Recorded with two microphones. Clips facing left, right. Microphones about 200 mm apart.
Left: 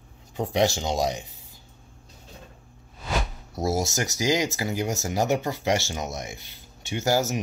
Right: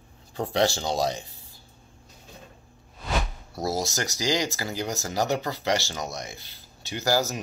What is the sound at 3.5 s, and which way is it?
Speech, 25° left (ahead or behind).